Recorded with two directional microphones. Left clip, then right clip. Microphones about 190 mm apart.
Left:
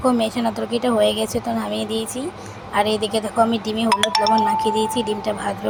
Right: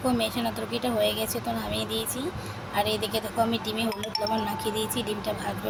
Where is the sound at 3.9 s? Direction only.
50° left (ahead or behind).